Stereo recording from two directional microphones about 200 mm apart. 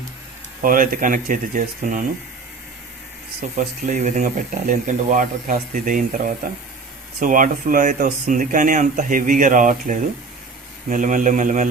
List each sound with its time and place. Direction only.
0.6 s speech: 45° right (ahead or behind)
3.5 s speech: 40° right (ahead or behind)